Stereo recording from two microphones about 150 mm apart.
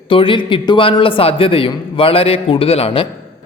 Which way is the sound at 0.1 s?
35° left (ahead or behind).